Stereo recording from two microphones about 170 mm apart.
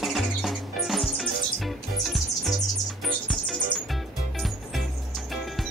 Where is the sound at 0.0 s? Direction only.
Centre (ahead or behind).